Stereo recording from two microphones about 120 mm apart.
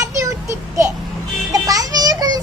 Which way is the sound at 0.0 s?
25° right (ahead or behind).